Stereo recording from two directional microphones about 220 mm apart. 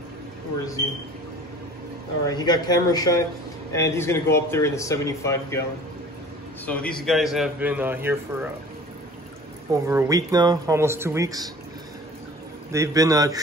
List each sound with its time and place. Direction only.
2.2 s speech: 20° left (ahead or behind)
6.6 s a man's voice: 5° left (ahead or behind)
9.7 s speech: 15° right (ahead or behind)
12.7 s speech: 15° right (ahead or behind)